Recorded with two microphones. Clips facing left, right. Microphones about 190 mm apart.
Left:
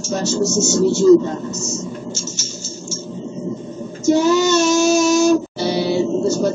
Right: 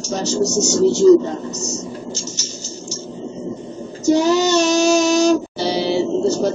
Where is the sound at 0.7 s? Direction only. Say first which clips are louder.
Right 2 dB; 15° right (ahead or behind).